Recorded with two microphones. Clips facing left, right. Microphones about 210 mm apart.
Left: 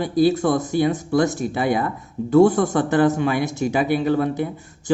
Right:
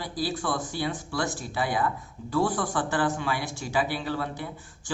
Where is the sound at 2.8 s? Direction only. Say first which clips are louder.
Left 9 dB; 20° left (ahead or behind).